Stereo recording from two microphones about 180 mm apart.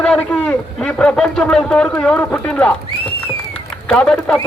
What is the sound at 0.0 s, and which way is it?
A man's voice, 5° left (ahead or behind).